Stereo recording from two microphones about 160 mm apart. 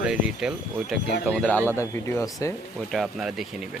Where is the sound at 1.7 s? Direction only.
15° left (ahead or behind).